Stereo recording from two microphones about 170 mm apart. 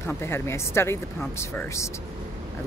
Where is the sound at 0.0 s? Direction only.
15° left (ahead or behind).